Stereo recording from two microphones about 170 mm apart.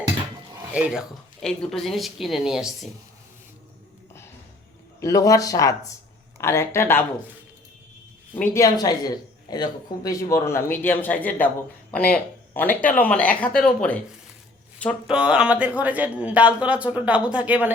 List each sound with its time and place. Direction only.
0.7 s speech: 5° right (ahead or behind)
4.9 s speech: 20° left (ahead or behind)
8.4 s speech: 20° left (ahead or behind)
15.0 s speech: 5° right (ahead or behind)